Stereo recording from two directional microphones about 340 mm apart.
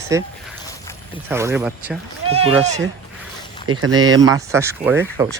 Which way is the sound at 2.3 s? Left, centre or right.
Centre.